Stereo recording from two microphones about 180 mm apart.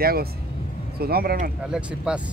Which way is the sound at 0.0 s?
55° right (ahead or behind).